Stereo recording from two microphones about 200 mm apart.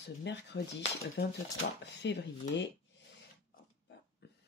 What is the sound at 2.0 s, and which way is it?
Speech, 60° left (ahead or behind).